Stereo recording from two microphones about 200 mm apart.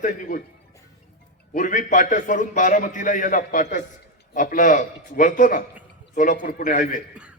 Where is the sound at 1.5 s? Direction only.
40° left (ahead or behind).